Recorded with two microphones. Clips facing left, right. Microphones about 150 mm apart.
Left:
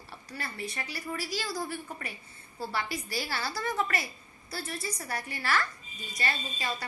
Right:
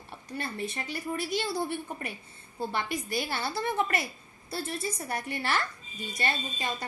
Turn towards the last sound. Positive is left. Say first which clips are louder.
# right 1 dB
turn(degrees=-20)  # may be behind; listen again after turning